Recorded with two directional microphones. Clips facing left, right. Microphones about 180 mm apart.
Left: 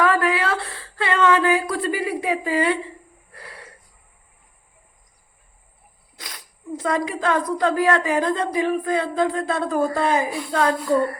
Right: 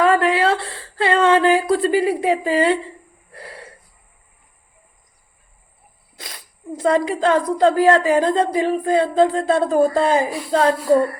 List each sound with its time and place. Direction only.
0.0 s a sound: 25° right (ahead or behind)
3.3 s wheeze: 30° right (ahead or behind)
6.8 s a woman's voice: 30° right (ahead or behind)